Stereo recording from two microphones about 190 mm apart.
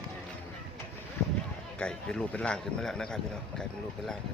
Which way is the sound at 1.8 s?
5° left (ahead or behind).